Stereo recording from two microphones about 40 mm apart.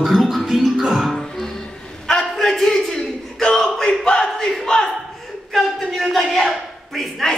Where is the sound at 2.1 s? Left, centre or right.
Centre.